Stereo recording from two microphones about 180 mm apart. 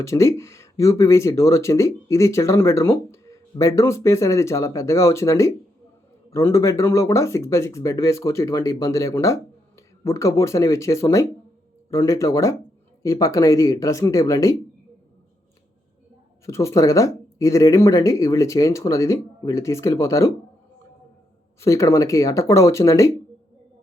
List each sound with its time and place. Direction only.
0.0 s speech: 15° left (ahead or behind)
16.5 s speech: 15° left (ahead or behind)
21.6 s speech: 15° left (ahead or behind)